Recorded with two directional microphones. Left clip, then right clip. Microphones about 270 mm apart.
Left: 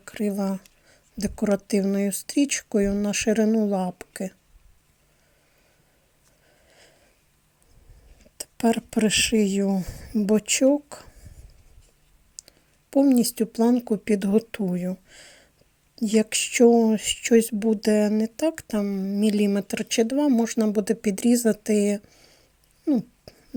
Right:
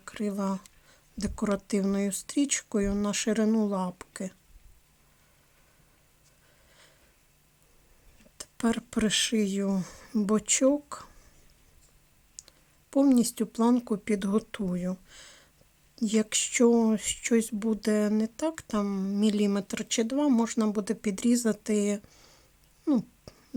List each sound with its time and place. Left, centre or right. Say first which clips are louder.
0.0 s speech: left 5 dB; centre
8.4 s speech: left 7 dB; centre
12.4 s speech: left 4 dB; centre